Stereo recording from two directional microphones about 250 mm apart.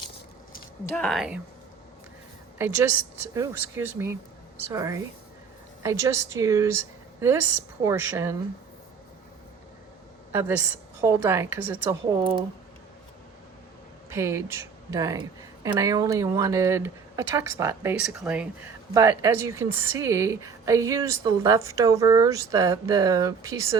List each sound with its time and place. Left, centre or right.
0.9 s speech: centre
2.6 s a woman's voice: centre
10.3 s speech: centre
14.1 s speech: centre